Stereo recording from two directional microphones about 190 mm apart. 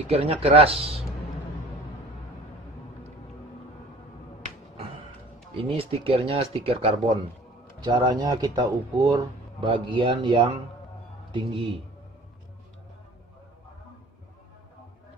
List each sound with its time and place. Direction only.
0.1 s speech: 30° right (ahead or behind)
5.6 s speech: 30° right (ahead or behind)
7.8 s speech: 20° right (ahead or behind)